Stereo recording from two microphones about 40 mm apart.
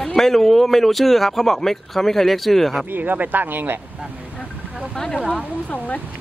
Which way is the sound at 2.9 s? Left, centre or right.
Right.